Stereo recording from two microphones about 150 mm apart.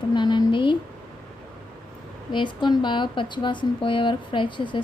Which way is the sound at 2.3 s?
30° left (ahead or behind).